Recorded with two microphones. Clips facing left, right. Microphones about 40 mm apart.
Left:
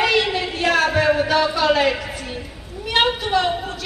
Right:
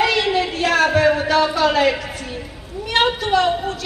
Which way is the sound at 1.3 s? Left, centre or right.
Centre.